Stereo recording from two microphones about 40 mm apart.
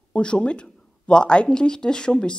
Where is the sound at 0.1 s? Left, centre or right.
Left.